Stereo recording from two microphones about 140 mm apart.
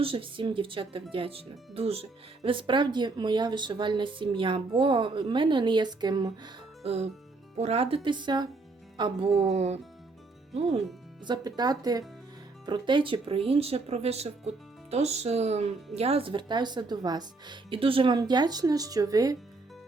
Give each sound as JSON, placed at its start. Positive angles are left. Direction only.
{"t": 0.0, "sound": "speech", "side_deg": -40}
{"t": 6.8, "sound": "speech", "side_deg": -50}
{"t": 9.4, "sound": "speech", "side_deg": -50}
{"t": 11.3, "sound": "speech", "side_deg": -30}